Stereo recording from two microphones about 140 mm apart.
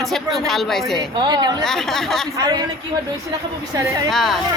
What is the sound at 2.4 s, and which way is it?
Speech, 25° right (ahead or behind).